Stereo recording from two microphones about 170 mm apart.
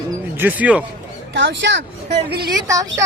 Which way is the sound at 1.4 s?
90° right.